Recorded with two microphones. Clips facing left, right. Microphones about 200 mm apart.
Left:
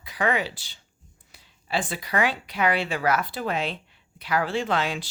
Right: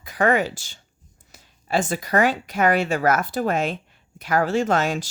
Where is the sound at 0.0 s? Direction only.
45° right (ahead or behind).